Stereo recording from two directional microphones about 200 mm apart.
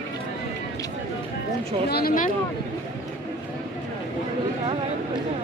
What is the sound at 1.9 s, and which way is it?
Speech, 50° left (ahead or behind).